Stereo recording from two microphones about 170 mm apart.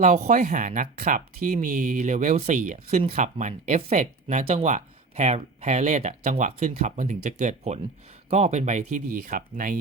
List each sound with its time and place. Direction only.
0.0 s speech: 45° right (ahead or behind)